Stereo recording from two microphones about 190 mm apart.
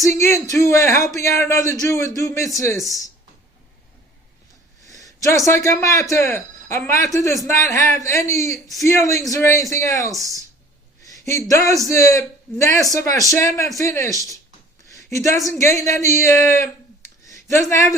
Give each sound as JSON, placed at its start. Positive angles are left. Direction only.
{"t": 0.2, "sound": "speech", "side_deg": 15}
{"t": 4.9, "sound": "speech", "side_deg": 15}
{"t": 15.1, "sound": "speech", "side_deg": 15}
{"t": 16.5, "sound": "a sound", "side_deg": 15}
{"t": 17.7, "sound": "speech", "side_deg": 15}